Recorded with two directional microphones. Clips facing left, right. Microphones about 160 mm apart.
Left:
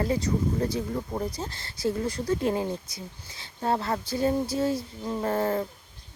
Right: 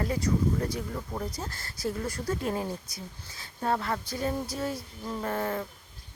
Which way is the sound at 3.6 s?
30° left (ahead or behind).